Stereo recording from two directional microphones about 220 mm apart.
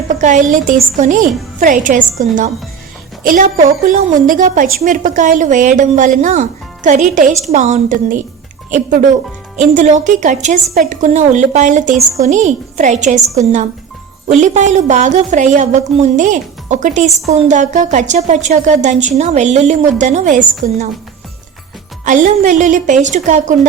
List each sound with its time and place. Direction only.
0.1 s a woman's voice: 35° right (ahead or behind)
22.0 s a woman's voice: 35° right (ahead or behind)